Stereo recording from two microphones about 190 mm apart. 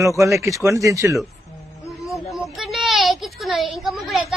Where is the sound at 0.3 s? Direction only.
15° right (ahead or behind).